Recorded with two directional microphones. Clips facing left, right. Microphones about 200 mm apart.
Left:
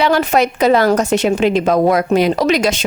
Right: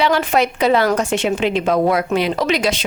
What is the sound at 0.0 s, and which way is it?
A woman's voice, 40° left (ahead or behind).